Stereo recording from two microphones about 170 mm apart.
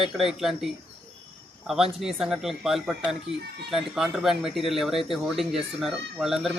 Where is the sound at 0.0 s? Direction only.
Centre (ahead or behind).